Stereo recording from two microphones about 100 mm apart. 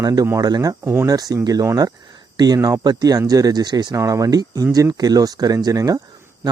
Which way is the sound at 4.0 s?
35° right (ahead or behind).